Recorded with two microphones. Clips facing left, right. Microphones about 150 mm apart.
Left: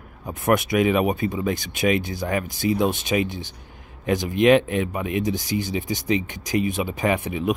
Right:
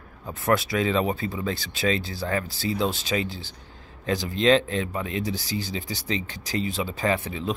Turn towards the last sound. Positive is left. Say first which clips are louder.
# left 3 dB
turn(degrees=15)  # may be behind; listen again after turning